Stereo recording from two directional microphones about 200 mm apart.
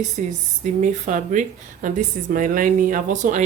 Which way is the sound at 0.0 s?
40° right (ahead or behind).